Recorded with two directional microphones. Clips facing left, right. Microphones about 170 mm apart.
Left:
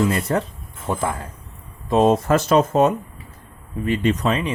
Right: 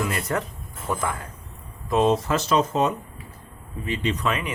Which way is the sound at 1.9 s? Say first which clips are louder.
Left 4 dB; 45° left (ahead or behind).